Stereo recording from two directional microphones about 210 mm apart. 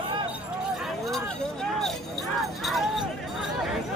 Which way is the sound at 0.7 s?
Centre (ahead or behind).